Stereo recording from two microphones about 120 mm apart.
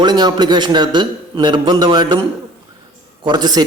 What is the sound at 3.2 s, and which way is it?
Speech, 35° right (ahead or behind).